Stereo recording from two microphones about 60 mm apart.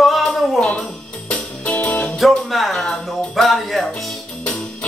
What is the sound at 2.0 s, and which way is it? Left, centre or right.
Speech, centre.